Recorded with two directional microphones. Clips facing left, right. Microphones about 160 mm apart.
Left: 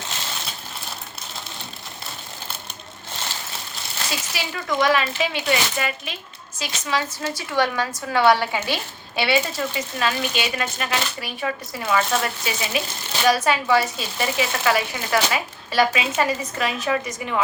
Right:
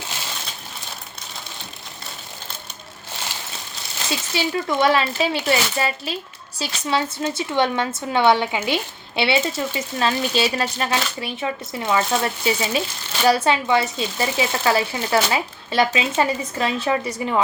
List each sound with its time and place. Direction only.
4.4 s a child's voice: 30° right (ahead or behind)